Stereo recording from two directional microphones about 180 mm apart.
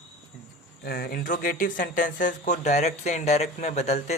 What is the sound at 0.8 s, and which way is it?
Speech, 55° left (ahead or behind).